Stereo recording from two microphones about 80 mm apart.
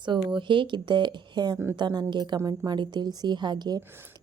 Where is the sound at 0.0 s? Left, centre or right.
Right.